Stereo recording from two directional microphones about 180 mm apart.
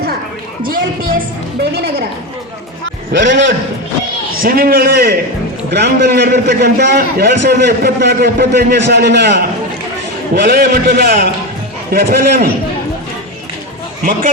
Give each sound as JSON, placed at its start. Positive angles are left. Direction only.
{"t": 0.6, "sound": "a sound", "side_deg": -55}
{"t": 3.1, "sound": "a man's voice", "side_deg": -85}
{"t": 4.4, "sound": "a man's voice", "side_deg": -55}
{"t": 5.7, "sound": "a man's voice", "side_deg": -70}
{"t": 10.3, "sound": "a man's voice", "side_deg": -55}